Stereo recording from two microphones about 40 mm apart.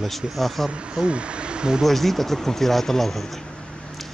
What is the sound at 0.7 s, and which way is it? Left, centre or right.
Speech, right.